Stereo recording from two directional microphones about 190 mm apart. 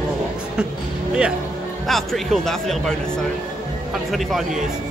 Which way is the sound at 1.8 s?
Centre (ahead or behind).